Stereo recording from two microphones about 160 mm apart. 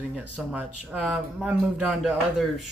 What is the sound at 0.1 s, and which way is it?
Speech, 10° right (ahead or behind).